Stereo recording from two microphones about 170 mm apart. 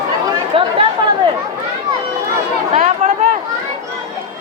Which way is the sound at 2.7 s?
40° right (ahead or behind).